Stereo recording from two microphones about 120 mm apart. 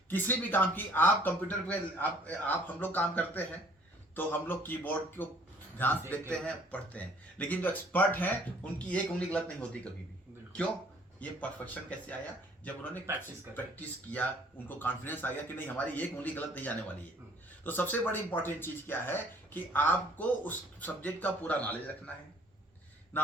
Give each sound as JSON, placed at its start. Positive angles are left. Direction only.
{"t": 0.1, "sound": "speech", "side_deg": 15}
{"t": 11.2, "sound": "speech", "side_deg": 10}
{"t": 23.1, "sound": "speech", "side_deg": 15}